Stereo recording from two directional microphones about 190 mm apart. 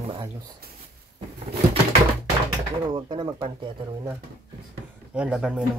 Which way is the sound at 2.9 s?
20° right (ahead or behind).